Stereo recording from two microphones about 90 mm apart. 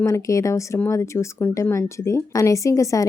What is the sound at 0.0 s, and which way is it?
A woman's voice, 35° left (ahead or behind).